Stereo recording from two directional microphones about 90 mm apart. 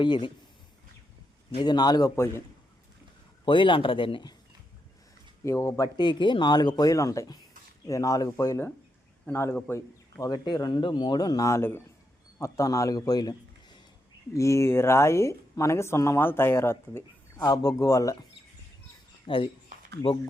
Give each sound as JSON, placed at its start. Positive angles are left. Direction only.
{"t": 0.0, "sound": "speech", "side_deg": 60}
{"t": 1.5, "sound": "speech", "side_deg": 50}
{"t": 2.0, "sound": "speech", "side_deg": 30}
{"t": 3.4, "sound": "speech", "side_deg": 65}
{"t": 5.5, "sound": "speech", "side_deg": 35}
{"t": 6.0, "sound": "speech", "side_deg": 60}
{"t": 9.7, "sound": "a man's voice", "side_deg": 45}
{"t": 14.3, "sound": "speech", "side_deg": 35}
{"t": 17.4, "sound": "speech", "side_deg": 45}
{"t": 19.2, "sound": "speech", "side_deg": 80}